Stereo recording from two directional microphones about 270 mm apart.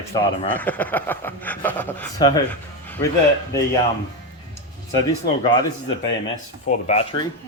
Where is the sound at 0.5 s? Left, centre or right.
Centre.